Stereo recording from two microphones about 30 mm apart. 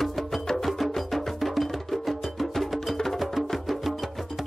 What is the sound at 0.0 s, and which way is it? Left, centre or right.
Music, centre.